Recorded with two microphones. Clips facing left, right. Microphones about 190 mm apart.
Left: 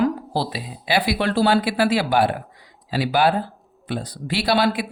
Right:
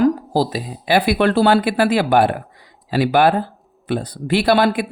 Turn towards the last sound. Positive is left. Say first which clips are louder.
# right 5 dB
turn(degrees=-55)  # may be behind; listen again after turning